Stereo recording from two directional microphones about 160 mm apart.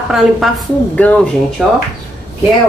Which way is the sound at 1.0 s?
10° left (ahead or behind).